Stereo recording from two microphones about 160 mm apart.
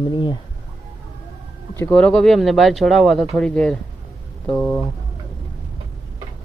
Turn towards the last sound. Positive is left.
turn(degrees=5)  # may be behind; listen again after turning